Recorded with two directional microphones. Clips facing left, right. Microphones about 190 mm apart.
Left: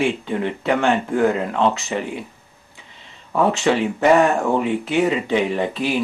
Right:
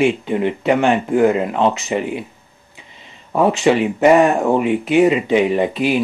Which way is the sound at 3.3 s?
15° right (ahead or behind).